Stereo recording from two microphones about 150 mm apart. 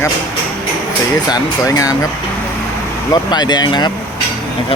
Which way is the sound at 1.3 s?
25° left (ahead or behind).